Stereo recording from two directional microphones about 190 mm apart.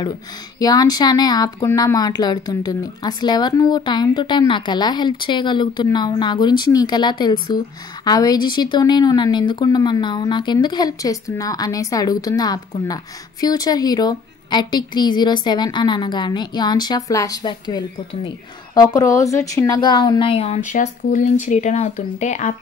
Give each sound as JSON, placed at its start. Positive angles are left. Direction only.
{"t": 0.6, "sound": "a woman's voice", "side_deg": 20}
{"t": 20.7, "sound": "speech", "side_deg": 40}